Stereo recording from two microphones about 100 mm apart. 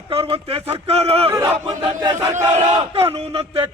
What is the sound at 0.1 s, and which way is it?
Speech, 70° right (ahead or behind).